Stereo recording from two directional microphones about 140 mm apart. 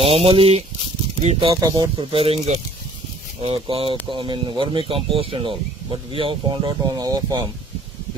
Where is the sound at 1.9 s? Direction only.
40° right (ahead or behind).